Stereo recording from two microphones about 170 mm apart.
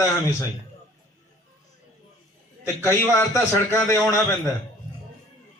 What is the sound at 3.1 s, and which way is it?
Speech, 20° left (ahead or behind).